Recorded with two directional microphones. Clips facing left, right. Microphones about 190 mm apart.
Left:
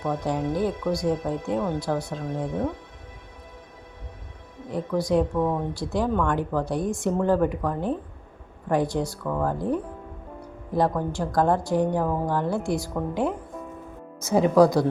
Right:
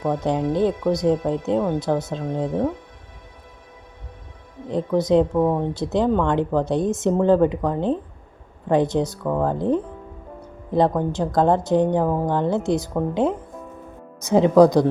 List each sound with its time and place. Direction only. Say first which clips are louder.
0.0 s speech: right 4 dB; 20° right (ahead or behind)
4.7 s speech: right 5 dB; 20° right (ahead or behind)